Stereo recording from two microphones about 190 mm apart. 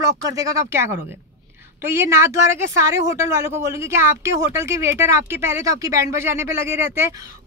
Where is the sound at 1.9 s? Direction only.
15° right (ahead or behind).